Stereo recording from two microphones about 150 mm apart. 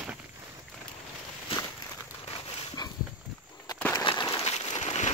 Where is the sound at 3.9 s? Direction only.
30° left (ahead or behind).